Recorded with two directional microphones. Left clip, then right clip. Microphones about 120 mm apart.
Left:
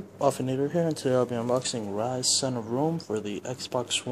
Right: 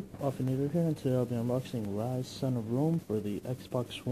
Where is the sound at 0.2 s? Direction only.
15° left (ahead or behind).